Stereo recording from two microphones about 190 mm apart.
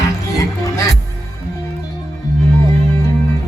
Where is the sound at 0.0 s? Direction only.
15° left (ahead or behind).